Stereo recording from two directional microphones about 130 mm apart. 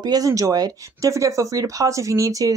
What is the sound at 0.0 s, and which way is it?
Speech, 30° right (ahead or behind).